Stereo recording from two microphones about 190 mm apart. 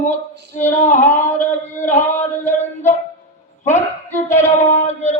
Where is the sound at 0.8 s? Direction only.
40° left (ahead or behind).